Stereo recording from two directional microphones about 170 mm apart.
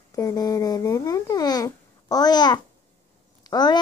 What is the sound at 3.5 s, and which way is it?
Speech, 25° left (ahead or behind).